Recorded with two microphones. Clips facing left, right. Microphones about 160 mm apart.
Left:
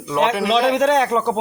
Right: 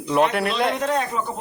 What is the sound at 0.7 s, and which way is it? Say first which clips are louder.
Speech: left 7 dB; 90° left.